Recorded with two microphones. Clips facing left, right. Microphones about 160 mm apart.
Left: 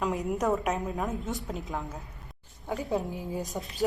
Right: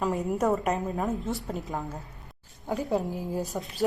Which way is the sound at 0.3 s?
Centre (ahead or behind).